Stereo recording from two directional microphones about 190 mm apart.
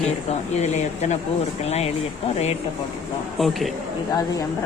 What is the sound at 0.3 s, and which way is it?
Speech, 35° left (ahead or behind).